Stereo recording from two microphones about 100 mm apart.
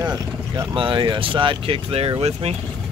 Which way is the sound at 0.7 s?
60° right (ahead or behind).